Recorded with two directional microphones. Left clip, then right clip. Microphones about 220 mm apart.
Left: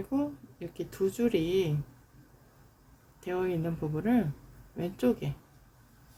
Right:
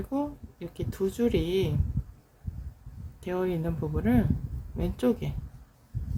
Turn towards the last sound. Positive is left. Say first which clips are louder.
# right 2 dB
turn(degrees=-15)  # may be behind; listen again after turning